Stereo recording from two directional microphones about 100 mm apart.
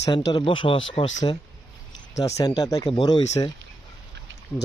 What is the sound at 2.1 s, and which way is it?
Speech, 35° left (ahead or behind).